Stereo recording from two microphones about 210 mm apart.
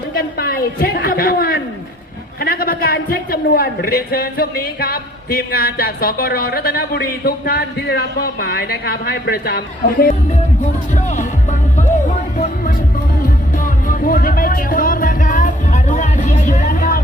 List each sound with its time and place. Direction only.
0.1 s a woman's voice: 45° left (ahead or behind)
10.9 s speech: 35° left (ahead or behind)
13.2 s music: 40° left (ahead or behind)